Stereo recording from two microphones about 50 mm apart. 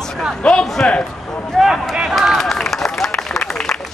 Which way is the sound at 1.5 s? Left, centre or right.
Centre.